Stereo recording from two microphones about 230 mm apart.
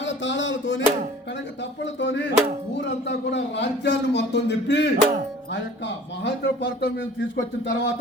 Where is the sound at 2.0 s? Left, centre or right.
Left.